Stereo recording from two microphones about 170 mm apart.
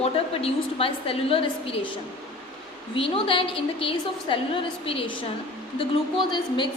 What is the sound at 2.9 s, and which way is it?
A woman's voice, 30° left (ahead or behind).